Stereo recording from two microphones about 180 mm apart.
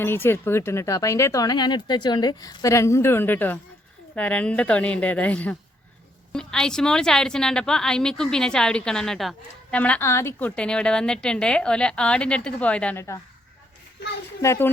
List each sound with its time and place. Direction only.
0.0 s a woman's voice: 10° left (ahead or behind)
14.0 s a woman's voice: 65° left (ahead or behind)
14.4 s speech: 15° left (ahead or behind)